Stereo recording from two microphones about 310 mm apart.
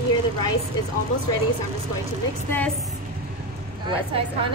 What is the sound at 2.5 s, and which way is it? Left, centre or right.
Speech, centre.